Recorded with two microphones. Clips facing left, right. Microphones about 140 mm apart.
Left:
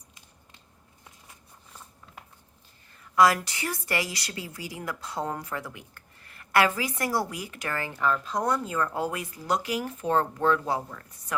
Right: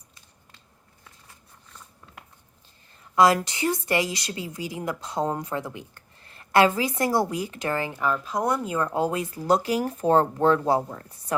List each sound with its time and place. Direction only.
3.2 s a woman's voice: 25° right (ahead or behind)